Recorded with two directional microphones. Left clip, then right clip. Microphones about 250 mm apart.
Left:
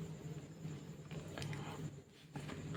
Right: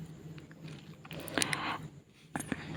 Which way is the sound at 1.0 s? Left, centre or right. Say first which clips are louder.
Right 16 dB; right.